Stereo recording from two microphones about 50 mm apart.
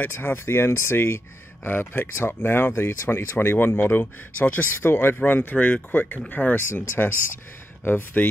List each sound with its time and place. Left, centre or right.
0.0 s speech: left
4.0 s speech: left
4.8 s speech: left
5.2 s speech: left